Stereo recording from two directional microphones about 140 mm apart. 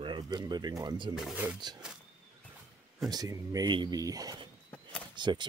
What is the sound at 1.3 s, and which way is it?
Speech, 10° right (ahead or behind).